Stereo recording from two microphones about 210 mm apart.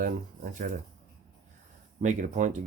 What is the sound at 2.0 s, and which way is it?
Speech, 35° right (ahead or behind).